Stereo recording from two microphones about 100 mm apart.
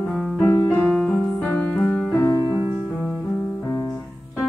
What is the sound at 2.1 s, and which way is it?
Music, 30° left (ahead or behind).